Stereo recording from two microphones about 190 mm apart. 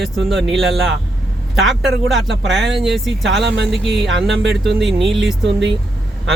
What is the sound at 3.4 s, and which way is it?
Speech, 65° right (ahead or behind).